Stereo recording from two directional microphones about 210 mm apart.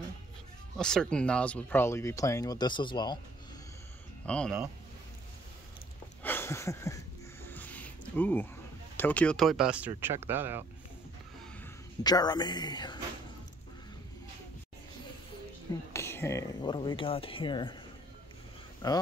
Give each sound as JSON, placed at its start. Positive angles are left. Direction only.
{"t": 0.7, "sound": "speech", "side_deg": 5}
{"t": 4.3, "sound": "speech", "side_deg": 5}
{"t": 6.2, "sound": "a sound", "side_deg": 10}
{"t": 8.9, "sound": "speech", "side_deg": 10}
{"t": 11.6, "sound": "speech", "side_deg": 20}
{"t": 15.9, "sound": "speech", "side_deg": 10}
{"t": 18.8, "sound": "speech", "side_deg": 20}